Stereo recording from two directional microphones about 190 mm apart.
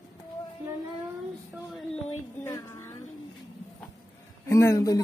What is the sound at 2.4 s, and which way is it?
Speech, 15° left (ahead or behind).